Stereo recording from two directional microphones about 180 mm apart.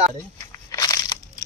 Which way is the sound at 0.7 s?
20° left (ahead or behind).